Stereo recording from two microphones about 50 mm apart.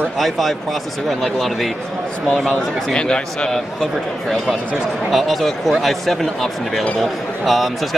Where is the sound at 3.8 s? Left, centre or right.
Centre.